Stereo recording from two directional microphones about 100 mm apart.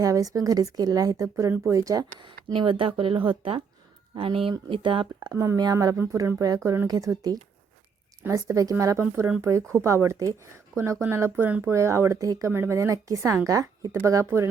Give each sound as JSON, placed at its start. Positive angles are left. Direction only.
{"t": 0.0, "sound": "speech", "side_deg": -35}
{"t": 5.3, "sound": "speech", "side_deg": -25}
{"t": 11.7, "sound": "speech", "side_deg": -30}